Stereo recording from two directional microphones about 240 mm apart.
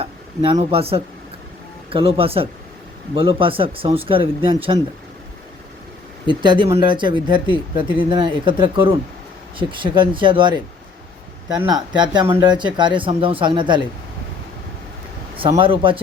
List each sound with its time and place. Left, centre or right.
0.0 s speech: right
6.2 s speech: centre
11.6 s speech: centre
15.4 s speech: centre